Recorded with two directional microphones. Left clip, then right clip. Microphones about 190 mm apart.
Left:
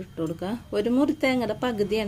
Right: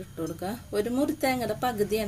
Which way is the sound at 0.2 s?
35° left (ahead or behind).